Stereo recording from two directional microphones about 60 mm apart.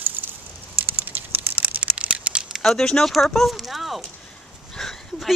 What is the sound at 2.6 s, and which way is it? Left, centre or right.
Speech, centre.